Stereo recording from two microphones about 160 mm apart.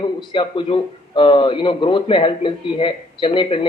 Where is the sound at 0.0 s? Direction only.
30° left (ahead or behind).